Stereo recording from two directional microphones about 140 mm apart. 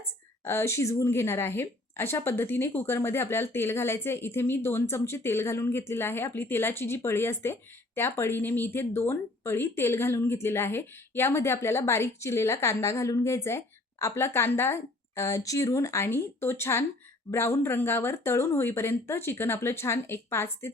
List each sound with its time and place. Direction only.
0.4 s a woman's voice: 20° left (ahead or behind)